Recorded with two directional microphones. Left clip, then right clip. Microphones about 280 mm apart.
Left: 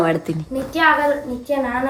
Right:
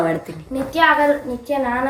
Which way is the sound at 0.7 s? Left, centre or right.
Centre.